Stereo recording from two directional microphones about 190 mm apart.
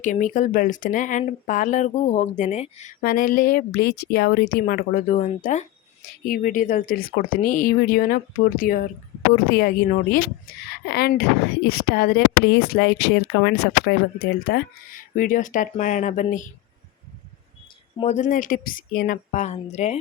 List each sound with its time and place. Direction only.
0.0 s a woman's voice: 40° left (ahead or behind)
3.0 s speech: 50° left (ahead or behind)
18.0 s a woman's voice: 40° left (ahead or behind)